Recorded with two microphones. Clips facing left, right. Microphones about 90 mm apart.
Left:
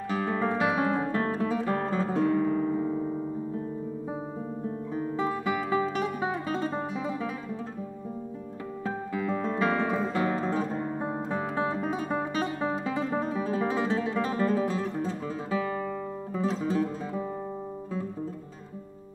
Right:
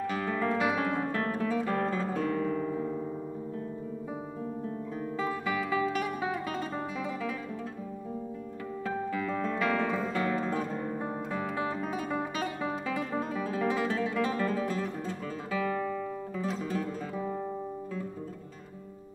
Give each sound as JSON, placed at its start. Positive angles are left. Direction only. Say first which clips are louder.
{"t": 0.2, "sound": "guitar", "louder": "left 3 dB", "side_deg": 25}
{"t": 4.9, "sound": "music", "louder": "left 4 dB", "side_deg": 25}
{"t": 8.8, "sound": "guitar", "louder": "left 1 dB", "side_deg": 20}
{"t": 14.7, "sound": "music", "louder": "left 3 dB", "side_deg": 25}